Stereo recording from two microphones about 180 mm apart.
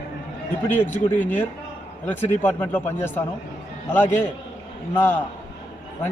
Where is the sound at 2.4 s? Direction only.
10° left (ahead or behind).